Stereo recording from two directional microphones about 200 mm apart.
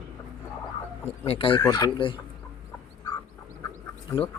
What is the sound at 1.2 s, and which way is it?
Speech, 25° left (ahead or behind).